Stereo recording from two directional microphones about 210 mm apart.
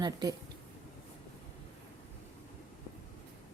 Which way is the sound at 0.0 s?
20° right (ahead or behind).